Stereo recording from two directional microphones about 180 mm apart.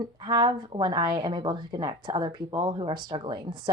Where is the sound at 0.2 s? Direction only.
25° right (ahead or behind).